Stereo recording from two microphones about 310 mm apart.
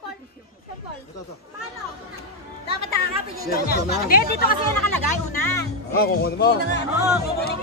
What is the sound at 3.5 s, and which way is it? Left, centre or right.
Speech, left.